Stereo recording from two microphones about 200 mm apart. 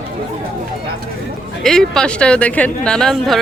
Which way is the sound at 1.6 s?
5° left (ahead or behind).